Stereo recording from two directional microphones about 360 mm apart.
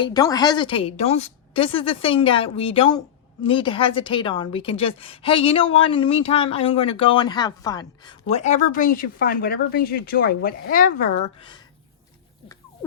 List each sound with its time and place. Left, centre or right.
0.0 s a woman's voice: centre